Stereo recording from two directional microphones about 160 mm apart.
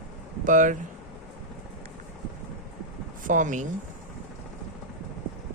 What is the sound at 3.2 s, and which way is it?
Speech, 55° right (ahead or behind).